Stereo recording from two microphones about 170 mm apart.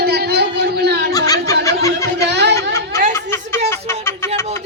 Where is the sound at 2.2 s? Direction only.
85° right.